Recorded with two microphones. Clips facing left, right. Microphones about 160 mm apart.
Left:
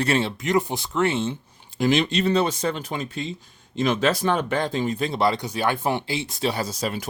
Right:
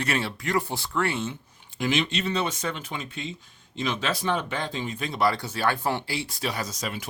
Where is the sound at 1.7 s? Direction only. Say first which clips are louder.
Left 5 dB; 40° left (ahead or behind).